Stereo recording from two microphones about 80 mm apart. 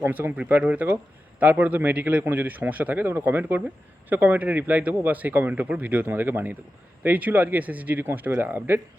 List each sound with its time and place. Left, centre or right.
0.0 s speech: right